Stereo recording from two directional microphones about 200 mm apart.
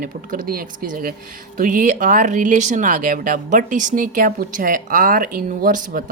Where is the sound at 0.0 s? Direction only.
45° right (ahead or behind).